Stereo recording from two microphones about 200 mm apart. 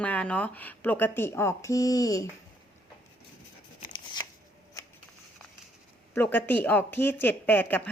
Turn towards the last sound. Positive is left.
turn(degrees=10)  # may be behind; listen again after turning